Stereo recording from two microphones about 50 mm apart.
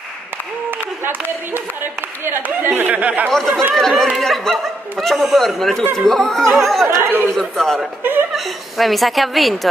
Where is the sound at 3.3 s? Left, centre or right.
Centre.